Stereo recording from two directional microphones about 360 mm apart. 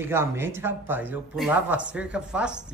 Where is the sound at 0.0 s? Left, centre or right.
Centre.